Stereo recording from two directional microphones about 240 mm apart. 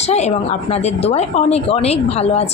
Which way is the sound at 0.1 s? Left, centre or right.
Left.